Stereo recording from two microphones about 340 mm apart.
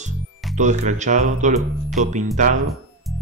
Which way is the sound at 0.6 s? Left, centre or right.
Right.